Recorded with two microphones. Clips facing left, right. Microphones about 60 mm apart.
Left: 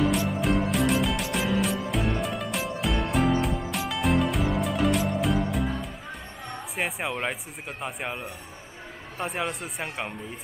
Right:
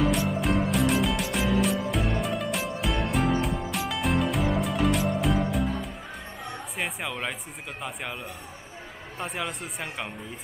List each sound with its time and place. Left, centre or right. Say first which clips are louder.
0.0 s music: even; centre
6.8 s speech: left 3 dB; centre
9.2 s speech: left 3 dB; centre